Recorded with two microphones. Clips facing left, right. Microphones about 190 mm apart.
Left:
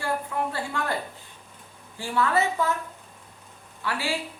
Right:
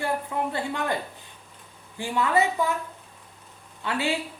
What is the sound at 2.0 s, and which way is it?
Speech, 15° right (ahead or behind).